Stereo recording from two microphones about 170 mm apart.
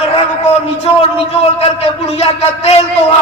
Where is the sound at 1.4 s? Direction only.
35° left (ahead or behind).